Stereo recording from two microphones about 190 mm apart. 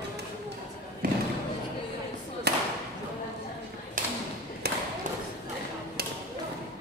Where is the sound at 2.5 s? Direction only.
60° right (ahead or behind).